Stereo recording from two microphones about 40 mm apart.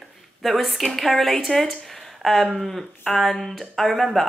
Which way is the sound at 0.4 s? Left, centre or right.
Centre.